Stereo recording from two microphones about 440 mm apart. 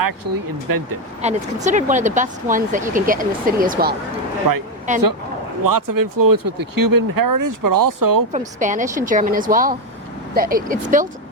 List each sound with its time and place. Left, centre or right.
0.0 s speech: right
1.2 s speech: centre
4.4 s speech: right
4.9 s speech: centre
5.6 s speech: right
8.3 s speech: centre